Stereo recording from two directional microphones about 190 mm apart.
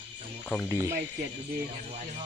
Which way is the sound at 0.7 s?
15° right (ahead or behind).